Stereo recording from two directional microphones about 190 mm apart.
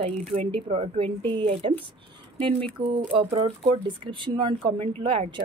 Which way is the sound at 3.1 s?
30° right (ahead or behind).